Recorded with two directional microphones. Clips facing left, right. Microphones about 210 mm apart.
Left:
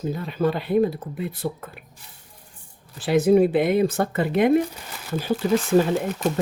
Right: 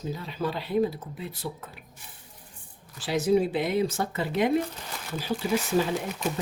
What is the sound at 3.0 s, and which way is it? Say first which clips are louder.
Speech: left 7 dB; 55° left (ahead or behind).